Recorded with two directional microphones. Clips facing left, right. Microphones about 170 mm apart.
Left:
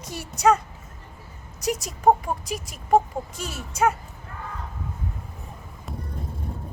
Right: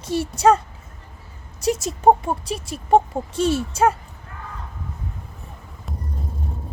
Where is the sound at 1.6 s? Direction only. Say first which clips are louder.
Right 4 dB; 25° right (ahead or behind).